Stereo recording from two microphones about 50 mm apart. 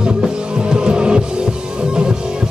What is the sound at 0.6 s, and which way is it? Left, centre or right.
Music, centre.